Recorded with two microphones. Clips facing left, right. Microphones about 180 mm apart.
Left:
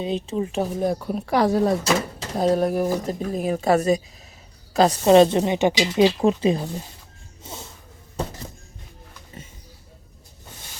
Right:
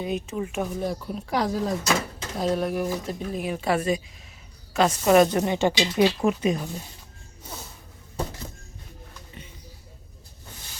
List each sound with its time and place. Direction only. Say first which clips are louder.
0.0 s speech: left 3 dB; 30° left (ahead or behind)
0.8 s speech: left 5 dB; 55° left (ahead or behind)
2.4 s a woman's voice: left 5 dB; 40° left (ahead or behind)
7.4 s a sound: left 2 dB; 25° left (ahead or behind)